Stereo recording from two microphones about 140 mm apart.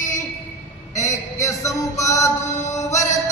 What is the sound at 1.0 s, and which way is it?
Mantra, 20° left (ahead or behind).